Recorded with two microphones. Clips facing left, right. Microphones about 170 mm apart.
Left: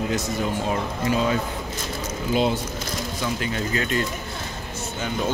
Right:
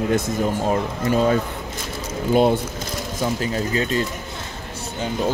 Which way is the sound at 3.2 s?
35° right (ahead or behind).